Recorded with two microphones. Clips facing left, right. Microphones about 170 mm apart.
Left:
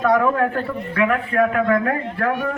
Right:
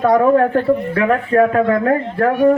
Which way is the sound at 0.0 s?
35° right (ahead or behind).